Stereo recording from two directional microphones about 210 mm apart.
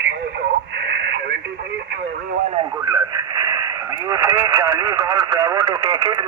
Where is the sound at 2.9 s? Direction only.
15° right (ahead or behind).